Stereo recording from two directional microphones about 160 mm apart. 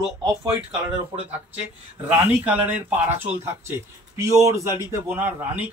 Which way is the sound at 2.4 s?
10° right (ahead or behind).